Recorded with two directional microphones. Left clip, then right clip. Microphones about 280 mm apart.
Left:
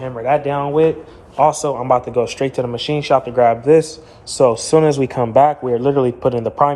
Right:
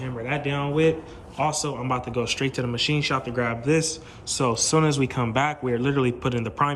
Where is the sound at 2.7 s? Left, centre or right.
Right.